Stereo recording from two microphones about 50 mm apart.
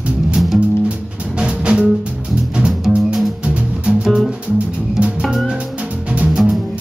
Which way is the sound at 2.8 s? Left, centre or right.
Centre.